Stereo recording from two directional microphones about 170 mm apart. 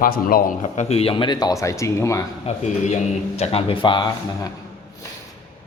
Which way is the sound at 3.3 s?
35° left (ahead or behind).